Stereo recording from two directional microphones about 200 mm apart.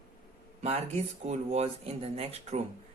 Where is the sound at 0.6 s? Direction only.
30° right (ahead or behind).